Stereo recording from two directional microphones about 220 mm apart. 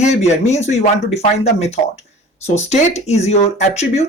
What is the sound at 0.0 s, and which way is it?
Speech, 30° left (ahead or behind).